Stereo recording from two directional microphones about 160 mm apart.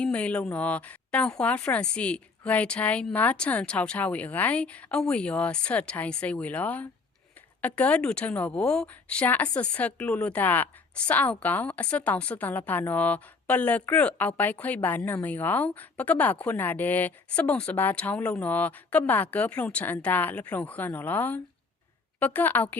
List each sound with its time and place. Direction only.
0.0 s a woman's voice: 10° left (ahead or behind)